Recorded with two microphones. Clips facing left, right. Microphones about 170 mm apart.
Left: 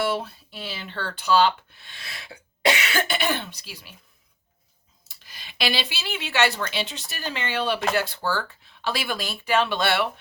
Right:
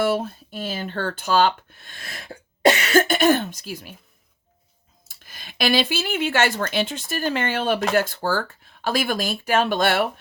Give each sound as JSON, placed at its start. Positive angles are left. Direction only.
{"t": 0.0, "sound": "speech", "side_deg": -45}
{"t": 5.0, "sound": "speech", "side_deg": -50}